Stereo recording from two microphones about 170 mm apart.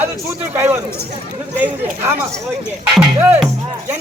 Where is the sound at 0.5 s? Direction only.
15° right (ahead or behind).